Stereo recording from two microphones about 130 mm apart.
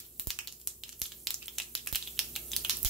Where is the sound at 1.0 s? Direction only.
Centre (ahead or behind).